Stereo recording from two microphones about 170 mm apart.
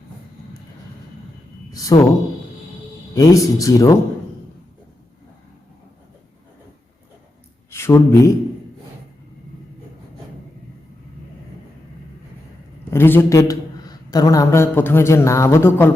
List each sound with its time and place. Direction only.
1.7 s speech: 20° left (ahead or behind)
3.2 s speech: 20° left (ahead or behind)
7.7 s speech: 15° left (ahead or behind)
12.9 s speech: 15° left (ahead or behind)